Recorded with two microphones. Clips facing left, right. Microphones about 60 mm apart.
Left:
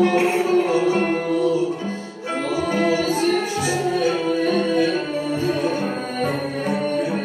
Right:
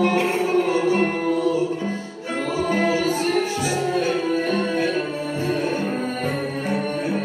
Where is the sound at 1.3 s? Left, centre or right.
Right.